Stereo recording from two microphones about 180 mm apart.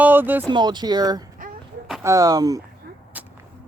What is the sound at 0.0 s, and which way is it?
Speech, 10° right (ahead or behind).